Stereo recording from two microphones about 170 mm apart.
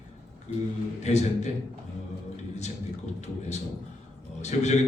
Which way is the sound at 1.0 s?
40° left (ahead or behind).